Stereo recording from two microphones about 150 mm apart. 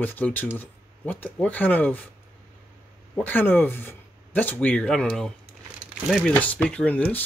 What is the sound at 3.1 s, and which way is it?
Speech, 10° left (ahead or behind).